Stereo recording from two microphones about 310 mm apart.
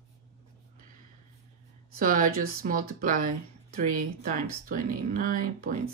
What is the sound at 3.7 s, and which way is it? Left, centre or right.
Speech, right.